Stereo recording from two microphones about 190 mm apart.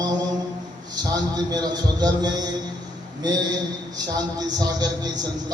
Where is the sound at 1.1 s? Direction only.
20° right (ahead or behind).